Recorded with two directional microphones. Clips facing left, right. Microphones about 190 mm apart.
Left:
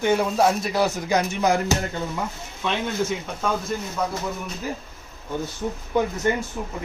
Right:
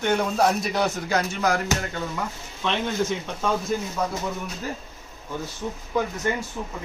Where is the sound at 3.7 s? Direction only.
5° right (ahead or behind).